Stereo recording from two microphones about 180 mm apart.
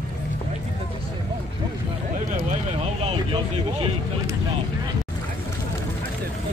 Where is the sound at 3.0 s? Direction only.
30° right (ahead or behind).